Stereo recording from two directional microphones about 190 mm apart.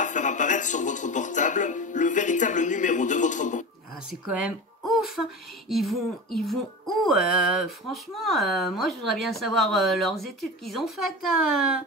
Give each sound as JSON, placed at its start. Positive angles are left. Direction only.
{"t": 0.0, "sound": "music", "side_deg": 40}
{"t": 4.4, "sound": "a sound", "side_deg": 0}
{"t": 5.7, "sound": "speech", "side_deg": 0}